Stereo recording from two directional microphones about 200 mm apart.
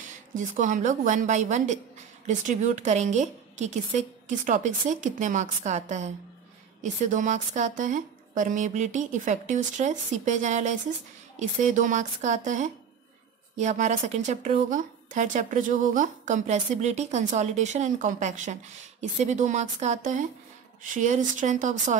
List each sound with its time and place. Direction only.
0.3 s speech: 40° right (ahead or behind)